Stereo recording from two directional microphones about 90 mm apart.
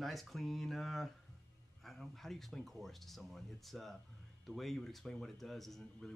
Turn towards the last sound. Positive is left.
turn(degrees=5)  # may be behind; listen again after turning